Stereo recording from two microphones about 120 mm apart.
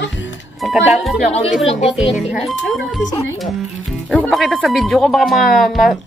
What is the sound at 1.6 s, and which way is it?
Speech, 60° left (ahead or behind).